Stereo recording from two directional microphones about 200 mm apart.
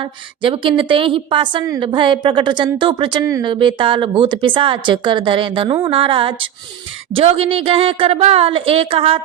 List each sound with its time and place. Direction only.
0.0 s a woman's voice: 25° right (ahead or behind)